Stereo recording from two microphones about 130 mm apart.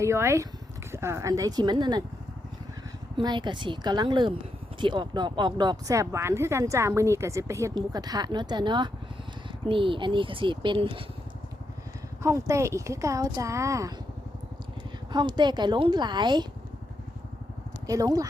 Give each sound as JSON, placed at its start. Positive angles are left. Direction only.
{"t": 0.0, "sound": "speech", "side_deg": -20}
{"t": 3.2, "sound": "speech", "side_deg": -35}
{"t": 5.9, "sound": "speech", "side_deg": -25}
{"t": 12.2, "sound": "speech", "side_deg": -25}
{"t": 15.1, "sound": "speech", "side_deg": -35}
{"t": 17.8, "sound": "speech", "side_deg": -30}